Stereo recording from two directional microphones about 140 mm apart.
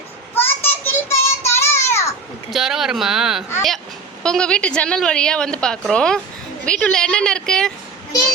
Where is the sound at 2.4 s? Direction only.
Centre (ahead or behind).